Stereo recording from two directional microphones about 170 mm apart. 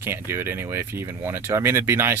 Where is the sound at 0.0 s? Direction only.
15° right (ahead or behind).